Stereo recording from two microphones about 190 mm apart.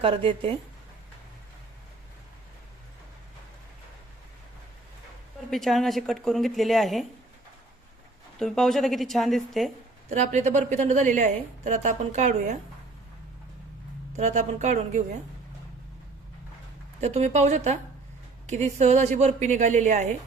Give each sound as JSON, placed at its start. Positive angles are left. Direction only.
{"t": 0.0, "sound": "a woman's voice", "side_deg": -30}
{"t": 5.5, "sound": "a woman's voice", "side_deg": 0}
{"t": 8.4, "sound": "a woman's voice", "side_deg": 0}
{"t": 10.1, "sound": "a woman's voice", "side_deg": -40}
{"t": 14.2, "sound": "a woman's voice", "side_deg": -40}
{"t": 17.0, "sound": "a woman's voice", "side_deg": -35}